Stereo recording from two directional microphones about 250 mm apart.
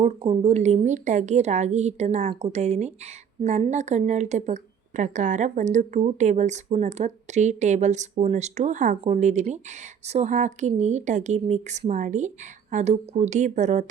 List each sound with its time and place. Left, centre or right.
0.0 s a woman's voice: right